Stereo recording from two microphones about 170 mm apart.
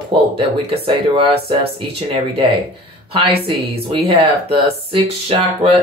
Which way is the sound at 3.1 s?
35° right (ahead or behind).